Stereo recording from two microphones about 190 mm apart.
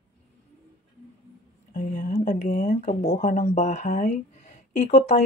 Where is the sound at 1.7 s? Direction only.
40° left (ahead or behind).